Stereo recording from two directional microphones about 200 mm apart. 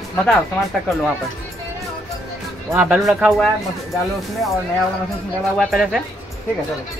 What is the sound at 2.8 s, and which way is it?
Speech, 5° right (ahead or behind).